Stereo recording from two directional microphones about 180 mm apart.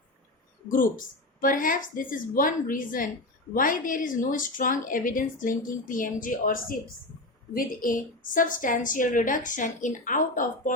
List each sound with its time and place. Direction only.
0.7 s a woman's voice: 50° left (ahead or behind)